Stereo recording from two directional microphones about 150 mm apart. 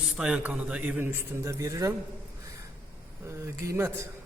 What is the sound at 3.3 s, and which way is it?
Speech, 20° right (ahead or behind).